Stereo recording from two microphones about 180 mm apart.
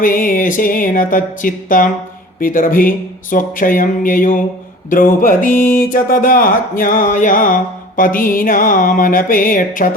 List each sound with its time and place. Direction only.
0.0 s speech: 50° left (ahead or behind)